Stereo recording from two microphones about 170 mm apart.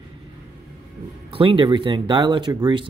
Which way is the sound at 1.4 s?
30° right (ahead or behind).